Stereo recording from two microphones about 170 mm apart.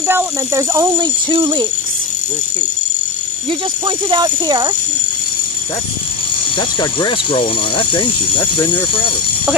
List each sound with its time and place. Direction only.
0.0 s speech: 15° right (ahead or behind)
3.8 s speech: 25° right (ahead or behind)
6.8 s speech: 25° left (ahead or behind)